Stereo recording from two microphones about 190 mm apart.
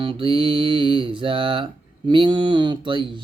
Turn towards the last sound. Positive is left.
turn(degrees=-25)  # may be behind; listen again after turning